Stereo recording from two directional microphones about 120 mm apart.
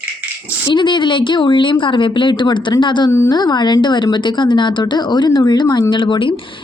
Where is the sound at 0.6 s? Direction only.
40° left (ahead or behind).